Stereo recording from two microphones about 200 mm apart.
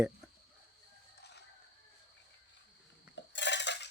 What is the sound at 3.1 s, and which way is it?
Cutlery, 60° left (ahead or behind).